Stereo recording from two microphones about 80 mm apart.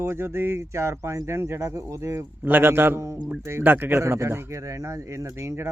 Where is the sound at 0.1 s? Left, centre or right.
Right.